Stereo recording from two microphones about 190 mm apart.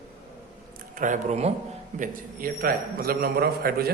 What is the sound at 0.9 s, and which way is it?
A man's voice, 40° right (ahead or behind).